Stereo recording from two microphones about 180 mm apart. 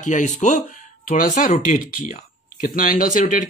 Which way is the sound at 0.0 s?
45° left (ahead or behind).